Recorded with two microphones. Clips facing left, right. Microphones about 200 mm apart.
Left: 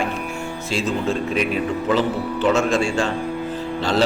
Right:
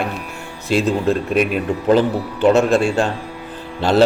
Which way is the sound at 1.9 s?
50° right (ahead or behind).